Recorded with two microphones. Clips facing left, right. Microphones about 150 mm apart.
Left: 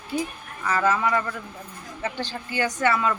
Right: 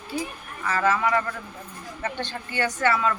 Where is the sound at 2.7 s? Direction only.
15° left (ahead or behind).